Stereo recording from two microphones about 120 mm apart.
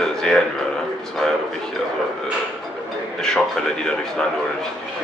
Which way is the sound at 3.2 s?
5° left (ahead or behind).